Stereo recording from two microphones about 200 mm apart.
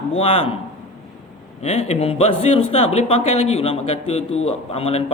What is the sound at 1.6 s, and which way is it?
A man's voice, 30° left (ahead or behind).